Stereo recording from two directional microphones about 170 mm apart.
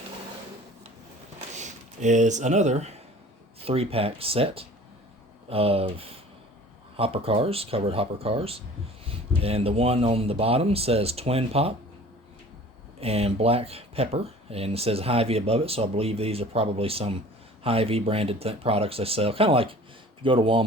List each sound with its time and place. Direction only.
1.5 s speech: 45° right (ahead or behind)
13.0 s speech: 35° right (ahead or behind)